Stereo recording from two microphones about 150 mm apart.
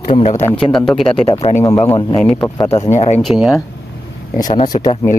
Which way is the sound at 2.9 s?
45° left (ahead or behind).